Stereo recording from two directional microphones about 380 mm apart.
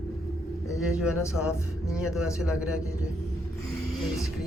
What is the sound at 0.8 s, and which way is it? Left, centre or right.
Speech, centre.